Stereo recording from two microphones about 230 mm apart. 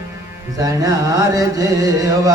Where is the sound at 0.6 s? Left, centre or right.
Centre.